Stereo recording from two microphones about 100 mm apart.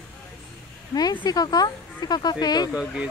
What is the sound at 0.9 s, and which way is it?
Speech, 45° left (ahead or behind).